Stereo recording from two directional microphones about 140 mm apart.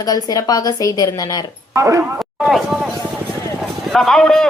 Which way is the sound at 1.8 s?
20° right (ahead or behind).